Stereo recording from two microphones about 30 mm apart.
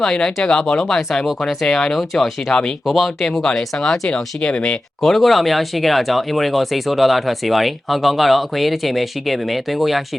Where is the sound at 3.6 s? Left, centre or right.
Centre.